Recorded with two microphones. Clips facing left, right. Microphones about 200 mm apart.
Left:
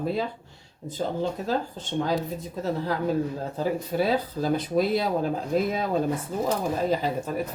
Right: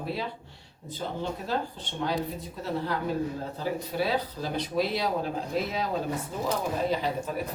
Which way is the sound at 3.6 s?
45° left (ahead or behind).